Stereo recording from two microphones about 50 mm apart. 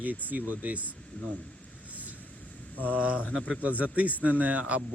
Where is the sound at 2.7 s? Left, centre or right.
Left.